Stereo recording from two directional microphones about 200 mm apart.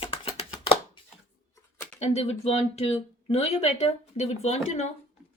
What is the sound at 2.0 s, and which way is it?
Speech, 30° left (ahead or behind).